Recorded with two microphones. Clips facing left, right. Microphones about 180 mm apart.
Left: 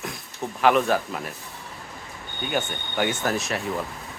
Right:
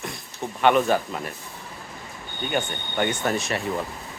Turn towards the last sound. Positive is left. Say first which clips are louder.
# right 1 dB
turn(degrees=0)  # may be behind; listen again after turning